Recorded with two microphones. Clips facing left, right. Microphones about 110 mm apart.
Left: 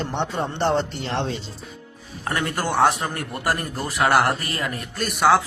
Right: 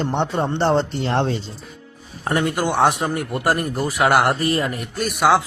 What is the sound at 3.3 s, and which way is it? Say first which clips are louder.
Speech: right 4 dB; 20° right (ahead or behind).